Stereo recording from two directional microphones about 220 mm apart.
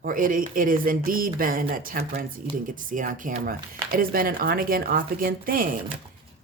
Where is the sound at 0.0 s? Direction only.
40° right (ahead or behind).